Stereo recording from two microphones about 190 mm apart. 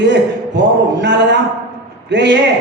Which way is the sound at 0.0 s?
65° right (ahead or behind).